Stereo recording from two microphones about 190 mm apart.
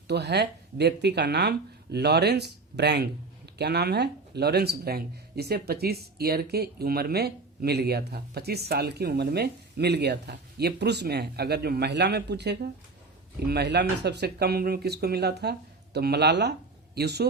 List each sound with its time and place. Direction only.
0.1 s speech: 60° right (ahead or behind)